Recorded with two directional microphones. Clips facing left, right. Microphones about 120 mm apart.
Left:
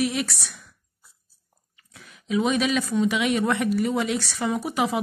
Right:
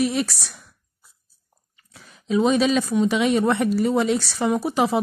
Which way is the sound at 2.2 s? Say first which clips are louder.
Right 4 dB; 30° right (ahead or behind).